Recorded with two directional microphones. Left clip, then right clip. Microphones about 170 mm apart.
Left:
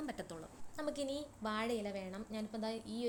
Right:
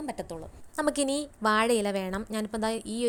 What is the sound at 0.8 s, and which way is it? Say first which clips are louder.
A woman's voice: right 13 dB; 45° right (ahead or behind).